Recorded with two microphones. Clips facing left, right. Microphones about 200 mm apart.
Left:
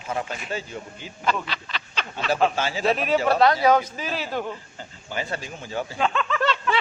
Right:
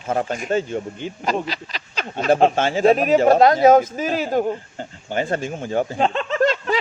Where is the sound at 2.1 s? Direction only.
50° right (ahead or behind).